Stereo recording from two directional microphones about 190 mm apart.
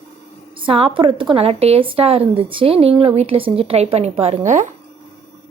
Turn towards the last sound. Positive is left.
turn(degrees=-40)  # may be behind; listen again after turning